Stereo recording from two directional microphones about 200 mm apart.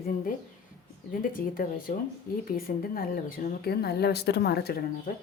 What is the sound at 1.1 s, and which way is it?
Speech, 45° left (ahead or behind).